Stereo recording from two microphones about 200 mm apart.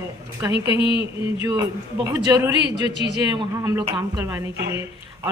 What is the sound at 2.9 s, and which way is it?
Speech, 60° right (ahead or behind).